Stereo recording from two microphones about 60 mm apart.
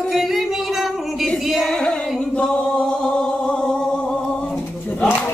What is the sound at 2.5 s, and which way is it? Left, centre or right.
Music, centre.